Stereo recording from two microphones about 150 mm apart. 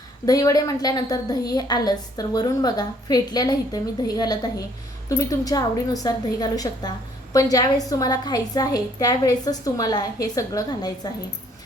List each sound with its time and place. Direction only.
0.3 s a woman's voice: 25° left (ahead or behind)